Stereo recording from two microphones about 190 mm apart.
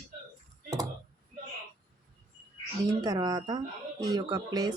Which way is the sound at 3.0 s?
20° right (ahead or behind).